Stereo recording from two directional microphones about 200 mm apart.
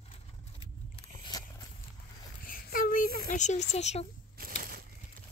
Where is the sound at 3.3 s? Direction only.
35° left (ahead or behind).